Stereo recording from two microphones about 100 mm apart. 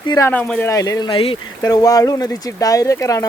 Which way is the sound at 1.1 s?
60° left (ahead or behind).